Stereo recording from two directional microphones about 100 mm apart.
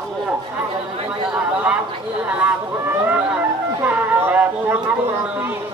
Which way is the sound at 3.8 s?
20° right (ahead or behind).